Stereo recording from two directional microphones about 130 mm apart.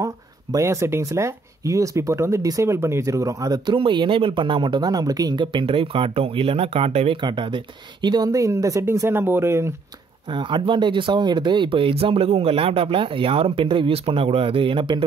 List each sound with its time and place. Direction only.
0.0 s speech: 25° right (ahead or behind); by 7.2 s 50° right (ahead or behind)
7.2 s speech: 35° right (ahead or behind); by 9.8 s 20° right (ahead or behind)
10.3 s speech: 40° right (ahead or behind)